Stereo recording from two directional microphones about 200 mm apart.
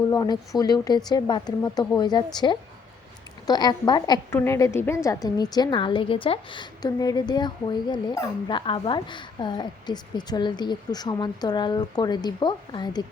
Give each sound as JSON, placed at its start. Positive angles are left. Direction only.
{"t": 0.1, "sound": "a woman's voice", "side_deg": 20}